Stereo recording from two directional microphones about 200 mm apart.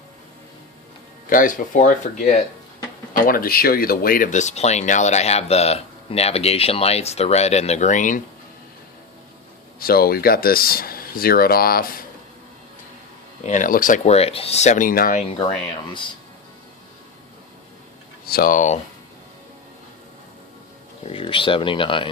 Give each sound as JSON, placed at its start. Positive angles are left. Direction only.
{"t": 1.3, "sound": "speech", "side_deg": 40}
{"t": 9.8, "sound": "speech", "side_deg": 50}
{"t": 13.4, "sound": "speech", "side_deg": 40}
{"t": 18.3, "sound": "speech", "side_deg": 45}
{"t": 21.0, "sound": "speech", "side_deg": 25}